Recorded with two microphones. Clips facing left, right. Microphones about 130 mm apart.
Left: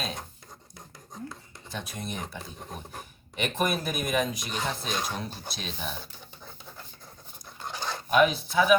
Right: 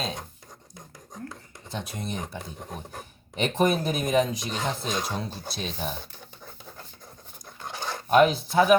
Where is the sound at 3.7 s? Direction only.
30° right (ahead or behind).